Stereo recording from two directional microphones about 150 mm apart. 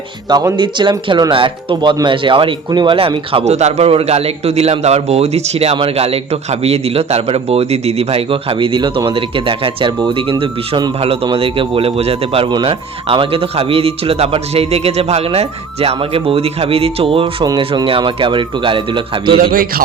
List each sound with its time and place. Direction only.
0.3 s speech: 25° right (ahead or behind)
19.4 s a man's voice: 80° right